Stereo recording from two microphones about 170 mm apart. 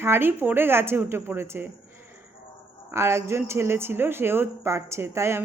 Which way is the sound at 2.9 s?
15° right (ahead or behind).